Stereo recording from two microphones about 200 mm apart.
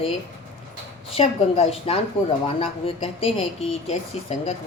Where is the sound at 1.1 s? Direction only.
30° left (ahead or behind).